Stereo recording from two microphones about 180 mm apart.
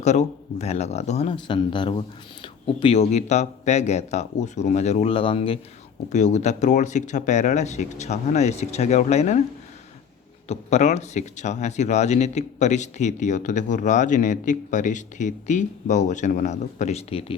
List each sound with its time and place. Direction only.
0.0 s speech: 40° left (ahead or behind)
6.1 s speech: 40° left (ahead or behind)
10.5 s speech: 40° left (ahead or behind)